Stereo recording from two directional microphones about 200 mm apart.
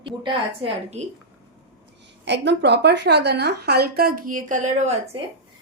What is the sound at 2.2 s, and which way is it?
A woman's voice, 60° right (ahead or behind).